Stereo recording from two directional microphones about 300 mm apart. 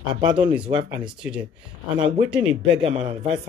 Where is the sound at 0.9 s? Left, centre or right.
Centre.